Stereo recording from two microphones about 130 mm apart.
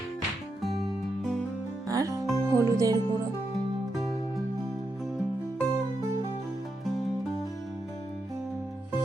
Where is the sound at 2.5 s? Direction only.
25° right (ahead or behind).